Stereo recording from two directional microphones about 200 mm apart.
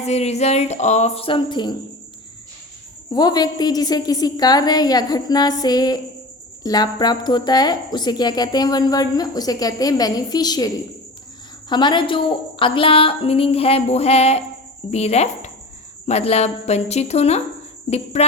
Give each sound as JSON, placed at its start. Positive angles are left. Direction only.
{"t": 0.0, "sound": "music", "side_deg": 35}
{"t": 3.1, "sound": "speech", "side_deg": 20}
{"t": 11.7, "sound": "speech", "side_deg": 20}
{"t": 14.8, "sound": "music", "side_deg": 35}